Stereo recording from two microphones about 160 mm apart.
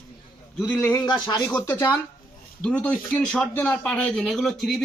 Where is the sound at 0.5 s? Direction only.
5° left (ahead or behind).